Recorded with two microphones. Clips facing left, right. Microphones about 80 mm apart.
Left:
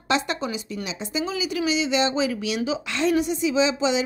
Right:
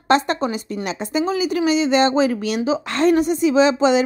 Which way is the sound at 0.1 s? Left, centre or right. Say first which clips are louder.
Right 7 dB; right.